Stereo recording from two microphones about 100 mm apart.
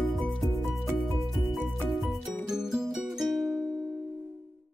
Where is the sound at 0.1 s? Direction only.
Centre (ahead or behind).